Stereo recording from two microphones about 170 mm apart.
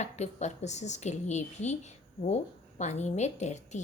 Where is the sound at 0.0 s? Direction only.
45° left (ahead or behind).